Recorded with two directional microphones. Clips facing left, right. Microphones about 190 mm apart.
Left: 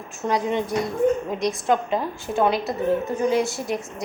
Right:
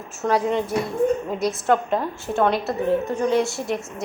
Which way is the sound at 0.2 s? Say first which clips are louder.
Right 2 dB; centre (ahead or behind).